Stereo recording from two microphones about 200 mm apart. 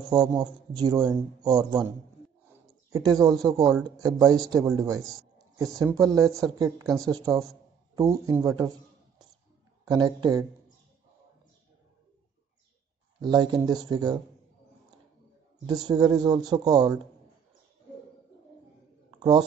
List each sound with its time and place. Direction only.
0.1 s a man's voice: 20° right (ahead or behind)
2.5 s a sound: 10° right (ahead or behind)
3.9 s speech: 15° right (ahead or behind)
4.6 s speech: centre (ahead or behind)
5.6 s speech: 15° right (ahead or behind)
9.8 s a man's voice: 20° right (ahead or behind)
13.2 s a man's voice: 20° right (ahead or behind)
15.6 s a man's voice: 20° right (ahead or behind)
19.1 s a sound: 20° right (ahead or behind)